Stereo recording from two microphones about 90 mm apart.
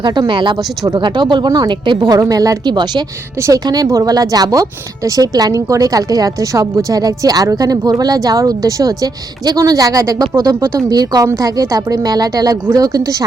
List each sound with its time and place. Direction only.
0.0 s a woman's voice: 60° right (ahead or behind)
2.1 s a woman's voice: 35° right (ahead or behind); by 3.0 s 55° right (ahead or behind)
3.4 s a woman's voice: 40° right (ahead or behind)